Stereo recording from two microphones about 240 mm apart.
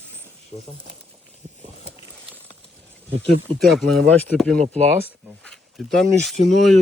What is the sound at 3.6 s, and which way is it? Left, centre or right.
Speech, centre.